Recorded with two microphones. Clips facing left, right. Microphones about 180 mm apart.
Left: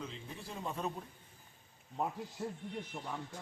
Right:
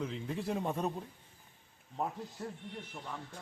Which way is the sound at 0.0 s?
80° right.